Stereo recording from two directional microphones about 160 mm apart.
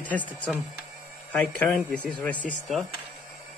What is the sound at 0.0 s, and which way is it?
Speech, 10° left (ahead or behind).